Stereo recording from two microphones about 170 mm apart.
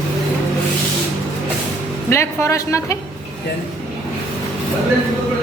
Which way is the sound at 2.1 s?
15° left (ahead or behind).